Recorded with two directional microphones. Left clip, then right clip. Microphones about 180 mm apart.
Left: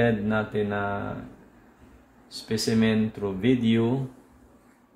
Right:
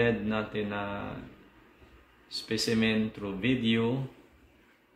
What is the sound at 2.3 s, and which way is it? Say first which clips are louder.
Speech: left 3 dB; 65° left (ahead or behind).